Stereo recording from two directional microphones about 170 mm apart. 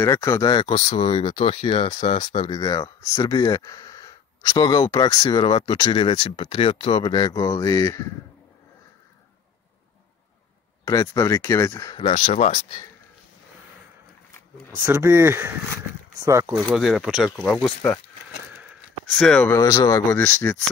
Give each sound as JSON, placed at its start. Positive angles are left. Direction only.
{"t": 0.0, "sound": "speech", "side_deg": 20}
{"t": 10.9, "sound": "speech", "side_deg": 20}
{"t": 12.0, "sound": "speech", "side_deg": 45}
{"t": 14.9, "sound": "speech", "side_deg": -15}
{"t": 16.6, "sound": "speech", "side_deg": 0}
{"t": 19.1, "sound": "speech", "side_deg": 5}
{"t": 19.5, "sound": "speech", "side_deg": 20}